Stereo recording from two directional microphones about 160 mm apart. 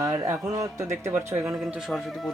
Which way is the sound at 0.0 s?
20° right (ahead or behind).